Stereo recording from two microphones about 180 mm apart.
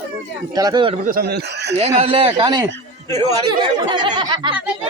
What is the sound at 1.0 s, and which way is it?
Speech, 55° right (ahead or behind).